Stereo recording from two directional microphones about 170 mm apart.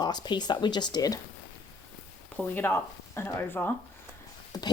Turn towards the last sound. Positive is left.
turn(degrees=25)  # may be behind; listen again after turning